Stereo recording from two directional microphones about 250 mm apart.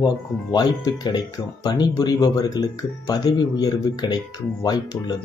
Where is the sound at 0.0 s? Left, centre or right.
Centre.